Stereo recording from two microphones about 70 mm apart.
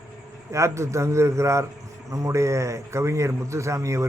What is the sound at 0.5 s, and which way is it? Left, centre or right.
A man's voice, right.